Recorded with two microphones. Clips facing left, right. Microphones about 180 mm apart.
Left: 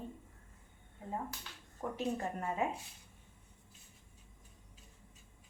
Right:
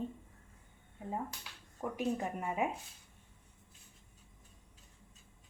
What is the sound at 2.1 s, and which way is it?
Speech, 15° right (ahead or behind).